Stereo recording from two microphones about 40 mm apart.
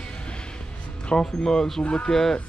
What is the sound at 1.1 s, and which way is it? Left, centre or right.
Speech, centre.